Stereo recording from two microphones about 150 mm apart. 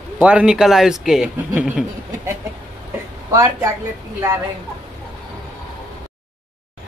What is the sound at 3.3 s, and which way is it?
Speech, 20° right (ahead or behind).